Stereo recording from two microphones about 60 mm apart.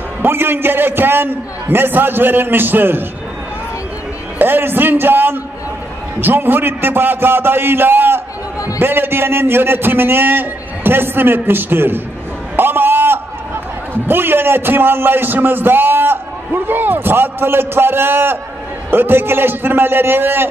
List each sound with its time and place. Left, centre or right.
0.2 s a man's voice: right
4.4 s a man's voice: right
12.5 s a sound: right
13.9 s a man's voice: right